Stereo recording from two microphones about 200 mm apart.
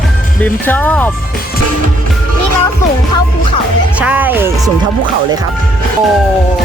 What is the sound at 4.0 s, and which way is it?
Music, 5° right (ahead or behind).